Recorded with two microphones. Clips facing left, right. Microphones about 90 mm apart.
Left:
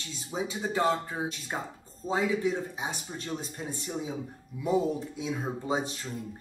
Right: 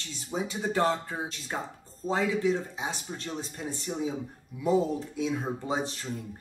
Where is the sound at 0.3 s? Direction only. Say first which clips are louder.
Right 1 dB; 5° left (ahead or behind).